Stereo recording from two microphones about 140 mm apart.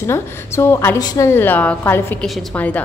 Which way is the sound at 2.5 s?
10° left (ahead or behind).